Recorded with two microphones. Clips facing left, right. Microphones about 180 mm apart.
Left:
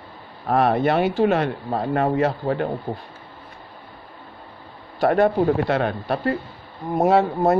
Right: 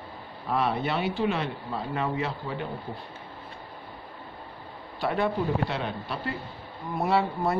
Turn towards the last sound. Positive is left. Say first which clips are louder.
# left 8 dB
turn(degrees=45)  # may be behind; listen again after turning